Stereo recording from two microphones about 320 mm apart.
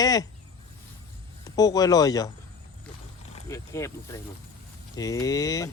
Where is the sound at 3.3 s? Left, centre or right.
Centre.